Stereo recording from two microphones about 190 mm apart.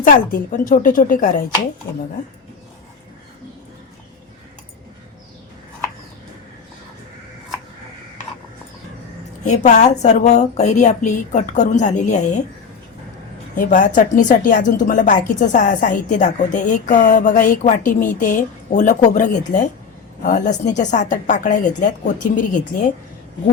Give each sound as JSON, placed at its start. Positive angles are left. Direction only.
{"t": 0.0, "sound": "speech", "side_deg": 45}
{"t": 9.5, "sound": "a woman's voice", "side_deg": 40}
{"t": 13.6, "sound": "a woman's voice", "side_deg": 40}